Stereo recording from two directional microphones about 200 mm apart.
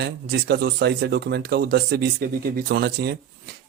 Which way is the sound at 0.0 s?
55° right (ahead or behind).